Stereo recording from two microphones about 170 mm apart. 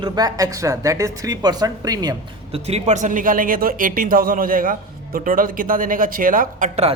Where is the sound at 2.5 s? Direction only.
40° right (ahead or behind); by 6.7 s 55° right (ahead or behind).